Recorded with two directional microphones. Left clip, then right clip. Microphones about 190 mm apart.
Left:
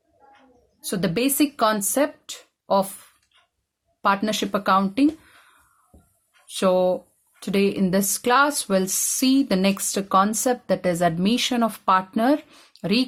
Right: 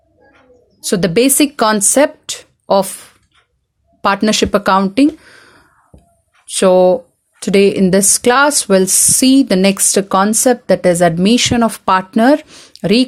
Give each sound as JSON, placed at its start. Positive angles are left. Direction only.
{"t": 0.8, "sound": "speech", "side_deg": -35}
{"t": 4.0, "sound": "speech", "side_deg": -35}